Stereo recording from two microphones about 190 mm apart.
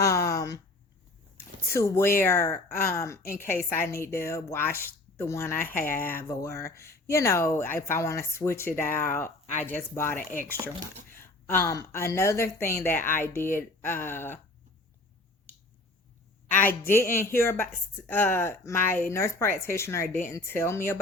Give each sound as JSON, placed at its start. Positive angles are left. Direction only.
{"t": 0.0, "sound": "a sound", "side_deg": 15}
{"t": 1.7, "sound": "a woman's voice", "side_deg": 15}
{"t": 11.2, "sound": "a woman's voice", "side_deg": 10}
{"t": 16.5, "sound": "a woman's voice", "side_deg": 10}